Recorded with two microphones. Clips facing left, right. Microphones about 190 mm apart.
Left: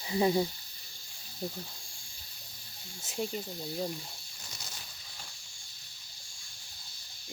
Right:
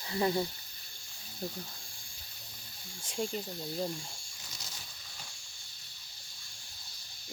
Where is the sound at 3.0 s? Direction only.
5° left (ahead or behind).